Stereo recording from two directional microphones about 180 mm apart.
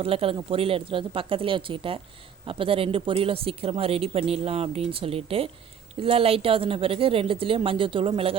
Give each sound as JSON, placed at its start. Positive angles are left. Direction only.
{"t": 0.0, "sound": "speech", "side_deg": -30}